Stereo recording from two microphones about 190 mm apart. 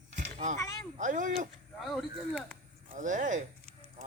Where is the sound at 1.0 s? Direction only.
45° right (ahead or behind).